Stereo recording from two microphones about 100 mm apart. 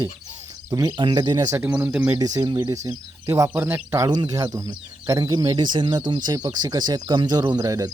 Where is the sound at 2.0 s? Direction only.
35° right (ahead or behind).